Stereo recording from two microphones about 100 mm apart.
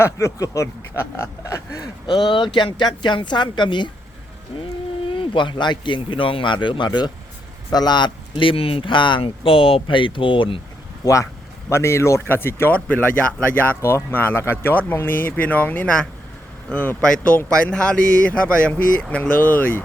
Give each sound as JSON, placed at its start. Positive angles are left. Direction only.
{"t": 0.0, "sound": "speech", "side_deg": 30}
{"t": 2.0, "sound": "speech", "side_deg": 50}
{"t": 5.0, "sound": "speech", "side_deg": 60}
{"t": 11.0, "sound": "speech", "side_deg": 30}